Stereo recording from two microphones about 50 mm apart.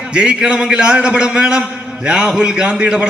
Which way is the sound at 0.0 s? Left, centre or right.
Right.